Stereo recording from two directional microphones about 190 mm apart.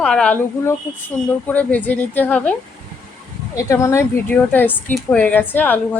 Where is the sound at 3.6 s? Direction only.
15° left (ahead or behind).